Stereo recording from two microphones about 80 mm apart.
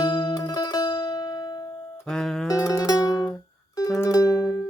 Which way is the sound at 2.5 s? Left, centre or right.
Left.